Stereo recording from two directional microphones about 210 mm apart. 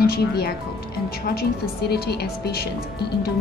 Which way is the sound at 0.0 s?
45° left (ahead or behind).